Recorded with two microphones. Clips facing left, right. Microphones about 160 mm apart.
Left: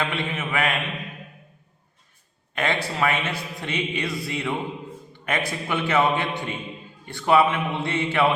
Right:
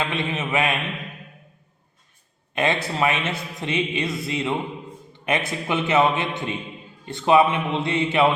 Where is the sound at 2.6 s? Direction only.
20° right (ahead or behind).